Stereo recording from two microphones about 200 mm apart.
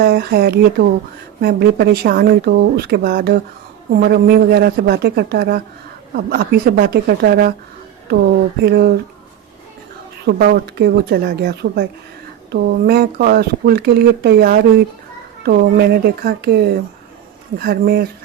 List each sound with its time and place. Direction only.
0.0 s speech: 50° right (ahead or behind)
8.6 s speech: 55° right (ahead or behind)
10.2 s speech: 50° right (ahead or behind)